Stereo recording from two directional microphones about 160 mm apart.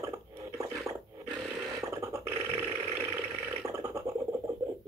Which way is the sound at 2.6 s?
15° right (ahead or behind).